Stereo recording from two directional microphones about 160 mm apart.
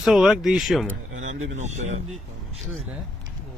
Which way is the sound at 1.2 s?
45° right (ahead or behind).